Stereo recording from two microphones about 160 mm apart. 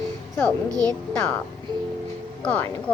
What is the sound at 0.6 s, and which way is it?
Speech, 20° right (ahead or behind).